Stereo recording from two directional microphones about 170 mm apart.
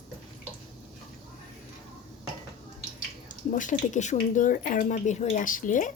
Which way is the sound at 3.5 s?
50° left (ahead or behind).